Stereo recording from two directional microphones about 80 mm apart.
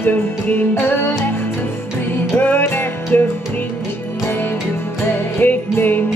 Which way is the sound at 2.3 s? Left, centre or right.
Left.